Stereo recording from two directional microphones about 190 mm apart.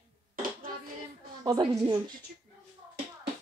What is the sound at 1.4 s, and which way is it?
Speech, 20° right (ahead or behind).